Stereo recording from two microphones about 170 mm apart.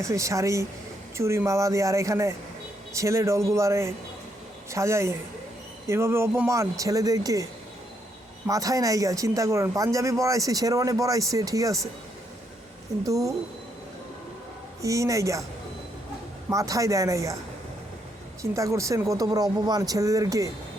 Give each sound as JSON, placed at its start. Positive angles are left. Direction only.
{"t": 0.0, "sound": "speech", "side_deg": -20}
{"t": 8.4, "sound": "speech", "side_deg": -20}
{"t": 13.1, "sound": "speech", "side_deg": -20}
{"t": 14.8, "sound": "speech", "side_deg": -20}
{"t": 16.5, "sound": "speech", "side_deg": -20}
{"t": 18.5, "sound": "speech", "side_deg": -20}